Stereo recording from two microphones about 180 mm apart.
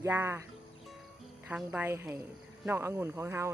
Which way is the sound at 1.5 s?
10° right (ahead or behind).